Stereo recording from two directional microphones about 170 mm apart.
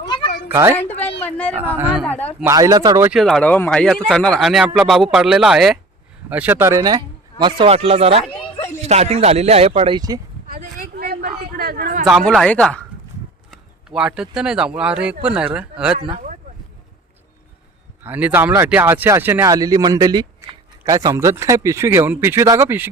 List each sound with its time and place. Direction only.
0.0 s meow: 25° left (ahead or behind)
0.4 s cat: 15° right (ahead or behind)
1.2 s speech: 10° left (ahead or behind)
1.6 s speech: 10° right (ahead or behind)
2.0 s speech: 10° left (ahead or behind)
2.5 s speech: 20° right (ahead or behind)
3.0 s speech: 5° right (ahead or behind); by 10.2 s 25° right (ahead or behind)
10.5 s a sound: 60° right (ahead or behind)
12.0 s speech: centre (ahead or behind)
18.0 s speech: 10° right (ahead or behind)